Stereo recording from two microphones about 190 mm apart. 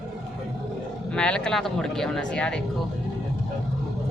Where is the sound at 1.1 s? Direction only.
5° left (ahead or behind).